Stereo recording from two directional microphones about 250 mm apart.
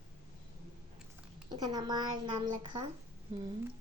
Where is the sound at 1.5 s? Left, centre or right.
Centre.